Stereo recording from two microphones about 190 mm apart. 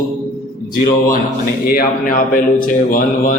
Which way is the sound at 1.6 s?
50° left (ahead or behind).